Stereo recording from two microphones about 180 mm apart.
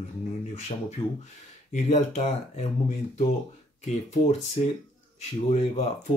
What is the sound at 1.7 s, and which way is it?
Speech, 40° left (ahead or behind).